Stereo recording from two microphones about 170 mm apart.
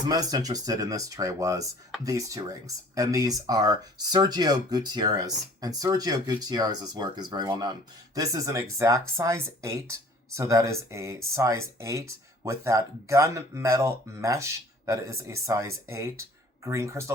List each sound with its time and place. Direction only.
0.0 s speech: 25° right (ahead or behind)